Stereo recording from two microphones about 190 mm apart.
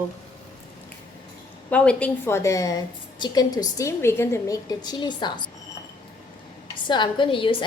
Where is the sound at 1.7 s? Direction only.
5° left (ahead or behind); by 5.5 s 25° left (ahead or behind).